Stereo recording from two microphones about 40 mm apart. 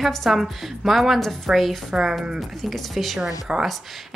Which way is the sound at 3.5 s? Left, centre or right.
Right.